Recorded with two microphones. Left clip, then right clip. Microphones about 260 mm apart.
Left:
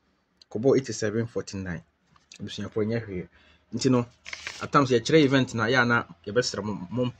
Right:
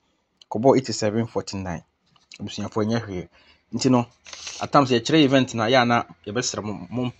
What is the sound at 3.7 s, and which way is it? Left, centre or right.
Speech, centre.